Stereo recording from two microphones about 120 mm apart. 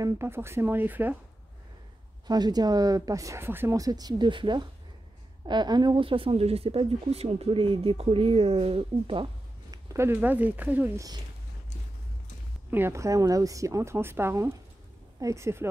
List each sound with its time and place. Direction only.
0.0 s a woman's voice: 20° right (ahead or behind)
2.2 s speech: 35° right (ahead or behind)
9.7 s speech: 20° right (ahead or behind)
12.7 s a woman's voice: 20° right (ahead or behind)